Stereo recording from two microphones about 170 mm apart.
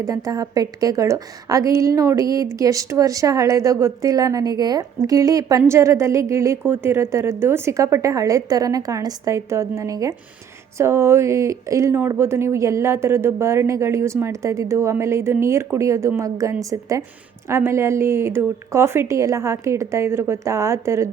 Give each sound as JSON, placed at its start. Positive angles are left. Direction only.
{"t": 0.0, "sound": "a woman's voice", "side_deg": -20}